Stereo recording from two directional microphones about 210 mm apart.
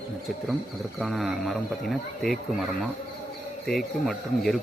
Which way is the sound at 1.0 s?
Centre (ahead or behind).